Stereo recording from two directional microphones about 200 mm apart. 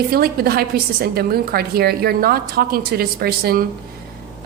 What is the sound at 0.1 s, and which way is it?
A woman's voice, 50° right (ahead or behind).